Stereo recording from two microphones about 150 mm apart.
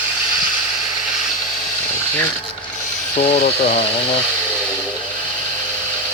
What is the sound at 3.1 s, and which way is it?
Speech, 45° left (ahead or behind).